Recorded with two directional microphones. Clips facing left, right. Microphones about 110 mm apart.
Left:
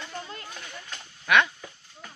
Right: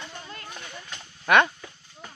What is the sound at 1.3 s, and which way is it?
Speech, 45° right (ahead or behind).